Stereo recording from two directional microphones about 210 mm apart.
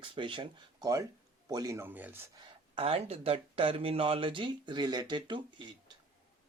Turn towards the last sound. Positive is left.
turn(degrees=-20)  # may be behind; listen again after turning